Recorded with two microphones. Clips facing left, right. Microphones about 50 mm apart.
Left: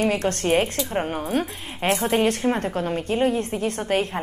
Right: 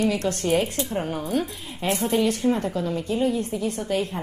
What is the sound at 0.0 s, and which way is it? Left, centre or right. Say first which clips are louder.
Speech: left 1 dB; left.